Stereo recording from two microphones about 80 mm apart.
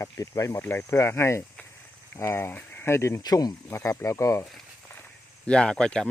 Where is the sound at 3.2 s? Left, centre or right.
Left.